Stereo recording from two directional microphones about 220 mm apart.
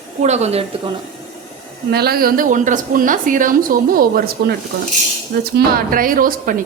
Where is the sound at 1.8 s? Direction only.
45° right (ahead or behind).